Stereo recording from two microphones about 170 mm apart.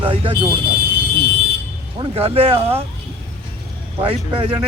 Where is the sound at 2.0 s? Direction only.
35° right (ahead or behind).